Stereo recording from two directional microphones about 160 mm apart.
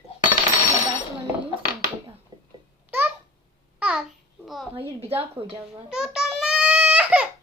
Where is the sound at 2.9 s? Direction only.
10° right (ahead or behind).